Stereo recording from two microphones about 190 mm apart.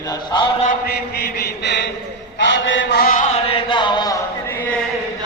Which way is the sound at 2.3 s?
75° left (ahead or behind).